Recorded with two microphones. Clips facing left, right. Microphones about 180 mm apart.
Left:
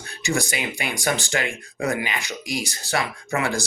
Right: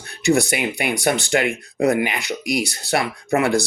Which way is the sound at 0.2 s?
60° right (ahead or behind).